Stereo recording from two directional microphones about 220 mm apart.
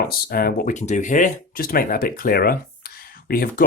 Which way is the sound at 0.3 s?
40° left (ahead or behind).